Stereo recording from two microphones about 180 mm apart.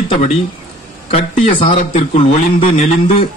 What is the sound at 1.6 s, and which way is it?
A man's voice, 45° left (ahead or behind).